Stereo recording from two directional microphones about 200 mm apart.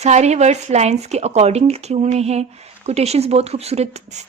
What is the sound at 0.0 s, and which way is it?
Speech, 35° right (ahead or behind).